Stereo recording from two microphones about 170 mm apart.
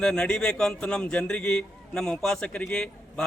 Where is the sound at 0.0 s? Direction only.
5° left (ahead or behind).